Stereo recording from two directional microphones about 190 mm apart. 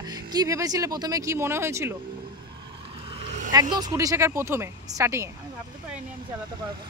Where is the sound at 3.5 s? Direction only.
20° right (ahead or behind).